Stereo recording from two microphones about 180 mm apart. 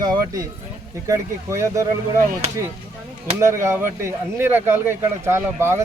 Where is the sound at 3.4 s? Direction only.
15° right (ahead or behind).